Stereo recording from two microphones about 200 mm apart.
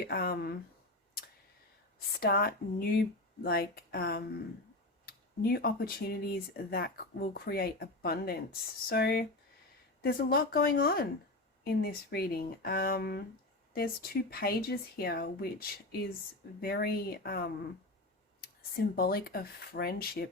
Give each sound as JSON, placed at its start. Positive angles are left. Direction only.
{"t": 0.1, "sound": "speech", "side_deg": 50}
{"t": 2.2, "sound": "speech", "side_deg": 50}